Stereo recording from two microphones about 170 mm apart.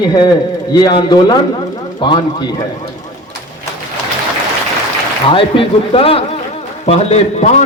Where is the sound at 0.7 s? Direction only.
25° left (ahead or behind).